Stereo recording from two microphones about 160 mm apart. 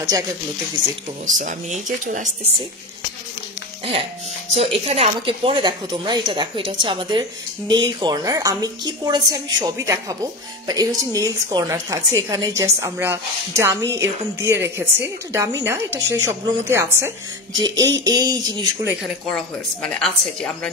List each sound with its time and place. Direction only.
1.2 s speech: 50° right (ahead or behind)
3.8 s a woman's voice: 35° right (ahead or behind)
19.2 s a woman's voice: 5° left (ahead or behind)